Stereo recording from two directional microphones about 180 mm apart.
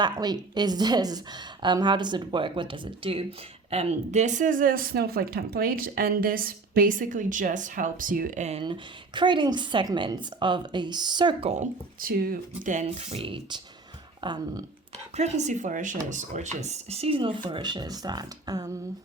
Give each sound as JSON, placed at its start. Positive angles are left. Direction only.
{"t": 0.0, "sound": "a woman's voice", "side_deg": -25}
{"t": 15.1, "sound": "speech", "side_deg": -40}